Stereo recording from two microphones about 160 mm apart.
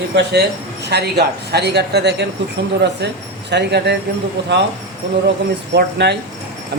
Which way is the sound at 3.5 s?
90° right.